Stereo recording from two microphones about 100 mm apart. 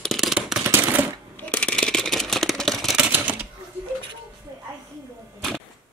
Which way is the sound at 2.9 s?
15° right (ahead or behind).